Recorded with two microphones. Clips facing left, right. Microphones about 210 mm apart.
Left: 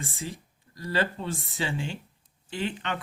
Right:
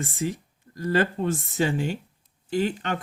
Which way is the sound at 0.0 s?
45° right (ahead or behind).